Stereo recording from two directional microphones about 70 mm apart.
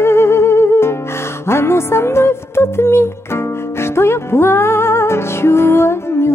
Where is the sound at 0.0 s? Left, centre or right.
Left.